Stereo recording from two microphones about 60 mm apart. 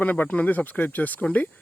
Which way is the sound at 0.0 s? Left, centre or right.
Left.